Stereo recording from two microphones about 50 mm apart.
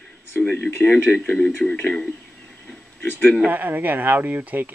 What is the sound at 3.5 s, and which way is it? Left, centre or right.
Speech, right.